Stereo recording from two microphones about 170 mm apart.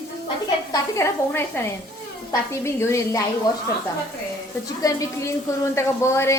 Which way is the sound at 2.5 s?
15° left (ahead or behind).